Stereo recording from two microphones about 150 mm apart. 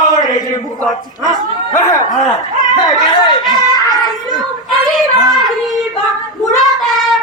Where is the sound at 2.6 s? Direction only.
25° left (ahead or behind).